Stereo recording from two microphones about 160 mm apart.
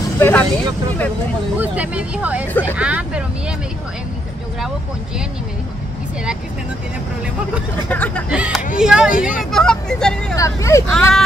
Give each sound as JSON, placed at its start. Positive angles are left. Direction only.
{"t": 0.2, "sound": "speech", "side_deg": 10}
{"t": 1.6, "sound": "speech", "side_deg": -10}
{"t": 7.9, "sound": "speech", "side_deg": 10}
{"t": 8.3, "sound": "speech", "side_deg": -5}
{"t": 10.3, "sound": "speech", "side_deg": 20}
{"t": 10.9, "sound": "speech", "side_deg": 5}